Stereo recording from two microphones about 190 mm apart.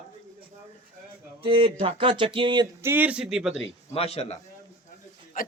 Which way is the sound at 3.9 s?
30° left (ahead or behind).